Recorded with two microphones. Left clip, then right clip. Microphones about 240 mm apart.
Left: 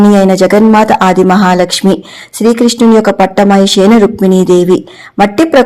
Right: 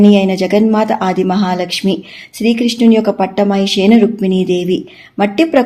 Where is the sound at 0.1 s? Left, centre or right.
Left.